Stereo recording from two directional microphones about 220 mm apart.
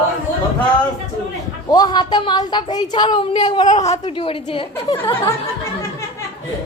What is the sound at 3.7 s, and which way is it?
Speech, 30° left (ahead or behind).